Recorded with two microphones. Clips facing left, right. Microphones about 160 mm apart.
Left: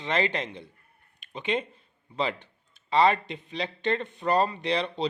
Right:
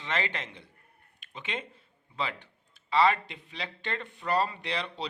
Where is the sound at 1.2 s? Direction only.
20° left (ahead or behind).